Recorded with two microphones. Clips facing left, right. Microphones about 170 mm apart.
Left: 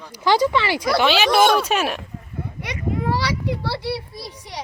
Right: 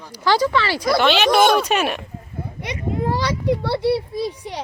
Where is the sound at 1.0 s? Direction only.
5° left (ahead or behind).